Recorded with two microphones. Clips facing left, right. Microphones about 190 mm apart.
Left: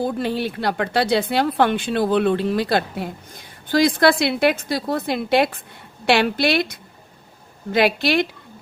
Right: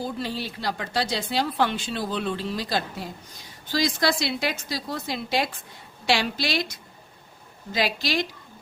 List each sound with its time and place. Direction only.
0.0 s a woman's voice: 55° left (ahead or behind)